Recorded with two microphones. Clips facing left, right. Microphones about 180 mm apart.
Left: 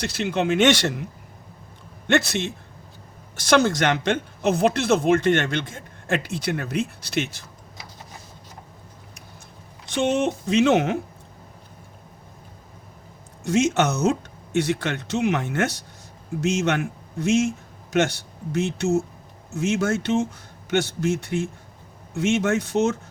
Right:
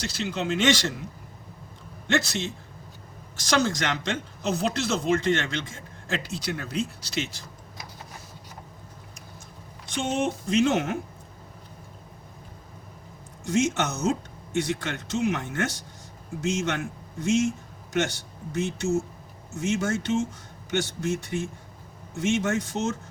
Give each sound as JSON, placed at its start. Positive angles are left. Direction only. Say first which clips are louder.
{"t": 0.0, "sound": "speech", "louder": "left 6 dB", "side_deg": 60}
{"t": 2.0, "sound": "speech", "louder": "left 5 dB", "side_deg": 60}
{"t": 9.9, "sound": "speech", "louder": "left 5 dB", "side_deg": 65}
{"t": 13.4, "sound": "speech", "louder": "left 4 dB", "side_deg": 70}
{"t": 18.5, "sound": "speech", "louder": "left 4 dB", "side_deg": 65}